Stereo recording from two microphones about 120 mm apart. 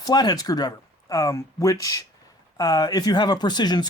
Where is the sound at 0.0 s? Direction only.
35° left (ahead or behind).